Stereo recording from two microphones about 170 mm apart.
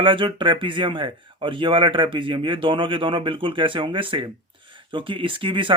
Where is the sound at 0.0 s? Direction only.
30° right (ahead or behind).